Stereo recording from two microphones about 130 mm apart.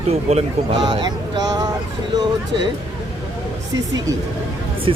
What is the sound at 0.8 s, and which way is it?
Speech, 35° right (ahead or behind).